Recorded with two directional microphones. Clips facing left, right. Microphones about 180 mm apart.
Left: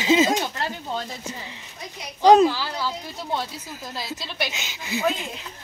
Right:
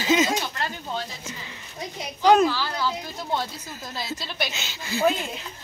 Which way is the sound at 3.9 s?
Centre (ahead or behind).